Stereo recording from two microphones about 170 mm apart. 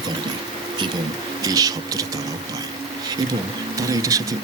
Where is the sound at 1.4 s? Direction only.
20° right (ahead or behind).